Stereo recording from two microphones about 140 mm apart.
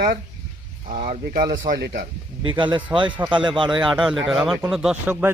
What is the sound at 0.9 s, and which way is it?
Speech, 75° right (ahead or behind).